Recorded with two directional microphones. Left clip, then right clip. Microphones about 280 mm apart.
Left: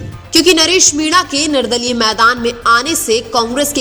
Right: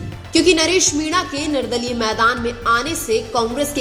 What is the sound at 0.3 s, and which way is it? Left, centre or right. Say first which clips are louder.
A woman's voice: left 5 dB; left.